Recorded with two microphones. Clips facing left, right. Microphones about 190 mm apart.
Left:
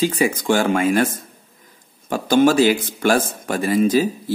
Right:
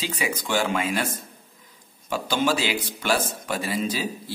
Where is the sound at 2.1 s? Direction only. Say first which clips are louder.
Left 9 dB; 50° left (ahead or behind).